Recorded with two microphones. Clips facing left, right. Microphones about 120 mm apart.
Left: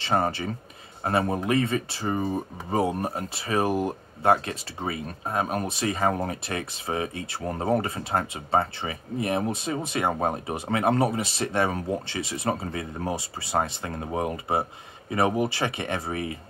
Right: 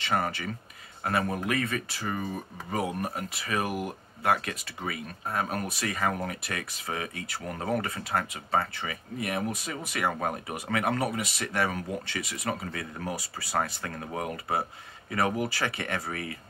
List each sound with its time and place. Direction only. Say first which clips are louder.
0.0 s speech: left 4 dB; 30° left (ahead or behind)